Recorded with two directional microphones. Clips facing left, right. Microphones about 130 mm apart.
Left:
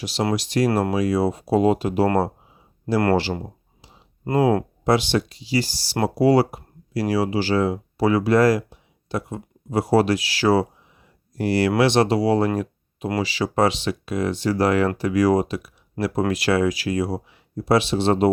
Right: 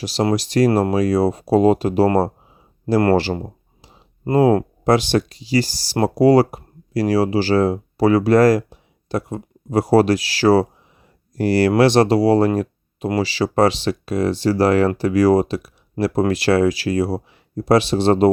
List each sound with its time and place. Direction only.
0.0 s speech: 40° right (ahead or behind)